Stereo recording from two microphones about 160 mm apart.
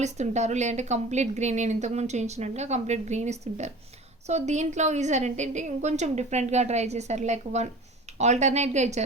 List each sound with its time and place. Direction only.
0.0 s a woman's voice: 45° right (ahead or behind)